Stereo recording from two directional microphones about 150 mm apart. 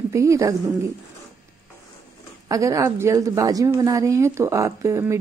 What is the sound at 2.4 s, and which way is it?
Speech, 20° right (ahead or behind).